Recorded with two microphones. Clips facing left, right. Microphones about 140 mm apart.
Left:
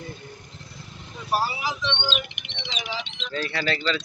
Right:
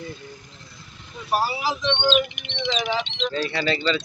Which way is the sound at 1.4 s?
35° right (ahead or behind).